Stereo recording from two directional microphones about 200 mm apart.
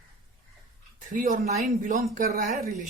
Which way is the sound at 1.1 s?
45° right (ahead or behind).